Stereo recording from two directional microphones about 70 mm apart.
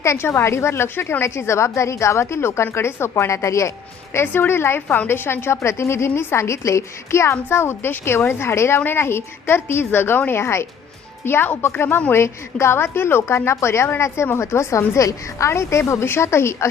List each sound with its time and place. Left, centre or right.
0.0 s a woman's voice: left
4.1 s a woman's voice: left
12.1 s a woman's voice: left